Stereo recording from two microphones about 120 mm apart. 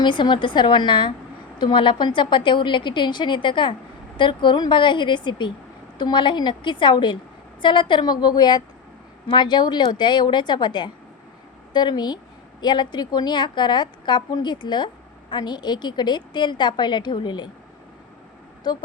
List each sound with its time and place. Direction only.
0.0 s a woman's voice: 40° left (ahead or behind)
18.7 s a woman's voice: 35° left (ahead or behind)